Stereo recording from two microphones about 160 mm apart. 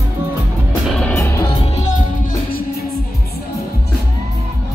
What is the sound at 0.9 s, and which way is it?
Music, 5° left (ahead or behind).